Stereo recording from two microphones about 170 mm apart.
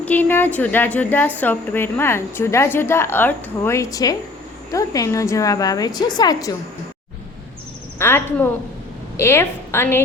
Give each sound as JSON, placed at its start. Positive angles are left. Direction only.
{"t": 0.0, "sound": "a woman's voice", "side_deg": 10}
{"t": 7.9, "sound": "a woman's voice", "side_deg": 15}